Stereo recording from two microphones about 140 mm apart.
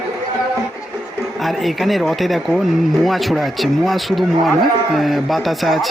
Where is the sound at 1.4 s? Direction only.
Centre (ahead or behind).